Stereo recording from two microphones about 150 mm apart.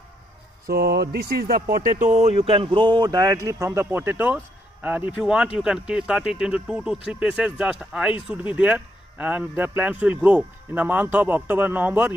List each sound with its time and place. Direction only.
0.7 s speech: 90° right; by 12.1 s 10° right (ahead or behind)